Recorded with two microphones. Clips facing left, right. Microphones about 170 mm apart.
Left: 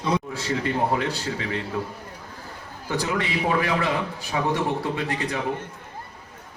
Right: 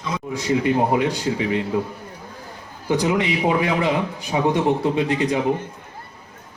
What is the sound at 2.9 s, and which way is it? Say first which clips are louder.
A man's voice: right 6 dB; 20° right (ahead or behind).